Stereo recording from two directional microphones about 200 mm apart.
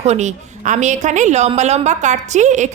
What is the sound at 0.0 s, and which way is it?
A woman's voice, 35° right (ahead or behind).